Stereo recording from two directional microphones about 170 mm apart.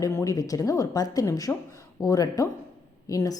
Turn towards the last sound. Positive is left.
turn(degrees=20)  # may be behind; listen again after turning